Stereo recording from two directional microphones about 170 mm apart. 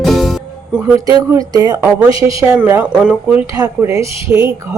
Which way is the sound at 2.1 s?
30° left (ahead or behind).